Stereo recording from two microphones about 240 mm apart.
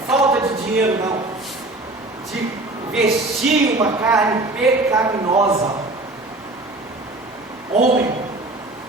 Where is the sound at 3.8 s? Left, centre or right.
Centre.